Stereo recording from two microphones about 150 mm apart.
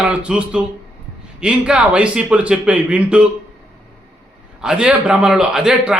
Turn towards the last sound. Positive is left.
turn(degrees=-5)  # may be behind; listen again after turning